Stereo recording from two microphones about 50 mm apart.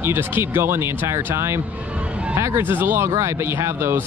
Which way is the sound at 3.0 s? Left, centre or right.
Right.